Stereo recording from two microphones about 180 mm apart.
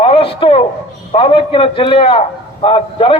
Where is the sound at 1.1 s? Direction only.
30° left (ahead or behind).